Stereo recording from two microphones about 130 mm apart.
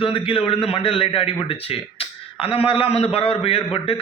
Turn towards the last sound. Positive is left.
turn(degrees=50)  # may be behind; listen again after turning